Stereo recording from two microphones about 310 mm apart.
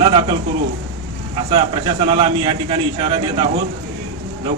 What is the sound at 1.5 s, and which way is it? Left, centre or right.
A man's voice, centre.